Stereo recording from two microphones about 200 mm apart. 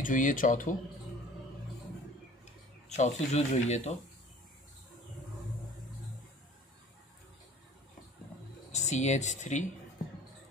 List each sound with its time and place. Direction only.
0.0 s speech: 40° left (ahead or behind)
2.9 s speech: 35° left (ahead or behind)
8.7 s speech: 35° left (ahead or behind)